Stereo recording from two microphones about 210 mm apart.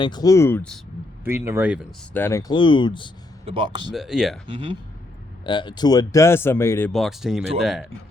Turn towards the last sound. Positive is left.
turn(degrees=0)  # may be behind; listen again after turning